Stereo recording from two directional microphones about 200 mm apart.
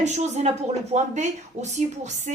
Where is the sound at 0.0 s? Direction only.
35° right (ahead or behind).